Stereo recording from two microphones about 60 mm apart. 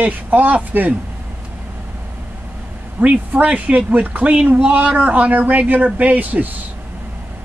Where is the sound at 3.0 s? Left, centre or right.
Right.